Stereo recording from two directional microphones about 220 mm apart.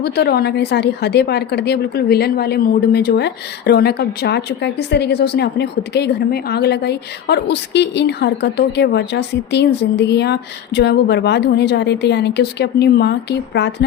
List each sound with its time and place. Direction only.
0.0 s a woman's voice: 45° left (ahead or behind)